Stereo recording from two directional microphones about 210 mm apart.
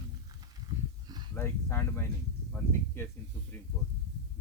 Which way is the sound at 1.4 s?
10° left (ahead or behind).